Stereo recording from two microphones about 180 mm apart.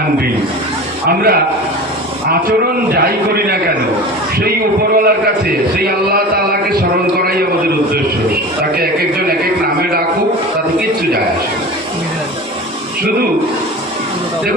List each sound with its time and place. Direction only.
1.0 s a man's voice: 60° right (ahead or behind)
2.5 s a man's voice: 60° right (ahead or behind)
8.7 s a man's voice: 55° right (ahead or behind)